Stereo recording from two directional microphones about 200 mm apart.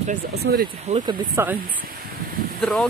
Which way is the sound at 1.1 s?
20° right (ahead or behind).